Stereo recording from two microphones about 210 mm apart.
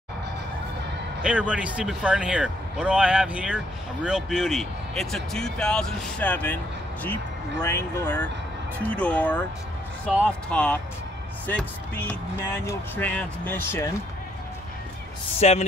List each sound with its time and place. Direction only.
1.2 s speech: 5° right (ahead or behind); by 13.8 s 10° left (ahead or behind)
15.4 s speech: 30° left (ahead or behind)